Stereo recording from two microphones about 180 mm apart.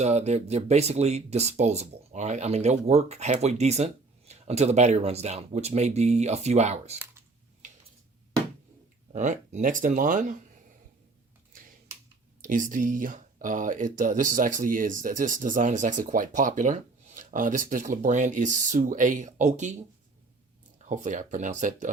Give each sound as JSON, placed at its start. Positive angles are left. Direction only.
{"t": 0.0, "sound": "speech", "side_deg": -40}
{"t": 7.6, "sound": "a sound", "side_deg": -45}
{"t": 9.1, "sound": "speech", "side_deg": -45}
{"t": 12.4, "sound": "speech", "side_deg": -45}
{"t": 20.8, "sound": "speech", "side_deg": -45}